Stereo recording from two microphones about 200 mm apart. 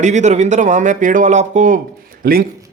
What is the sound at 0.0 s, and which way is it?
A man's voice, 35° right (ahead or behind).